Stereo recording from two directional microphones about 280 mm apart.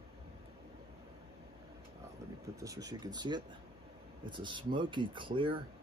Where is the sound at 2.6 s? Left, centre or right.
Centre.